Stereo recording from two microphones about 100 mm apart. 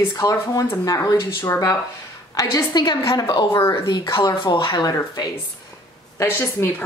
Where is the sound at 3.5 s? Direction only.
25° left (ahead or behind).